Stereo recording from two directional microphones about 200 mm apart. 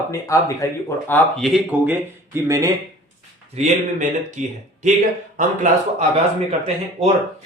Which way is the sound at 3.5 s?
35° right (ahead or behind).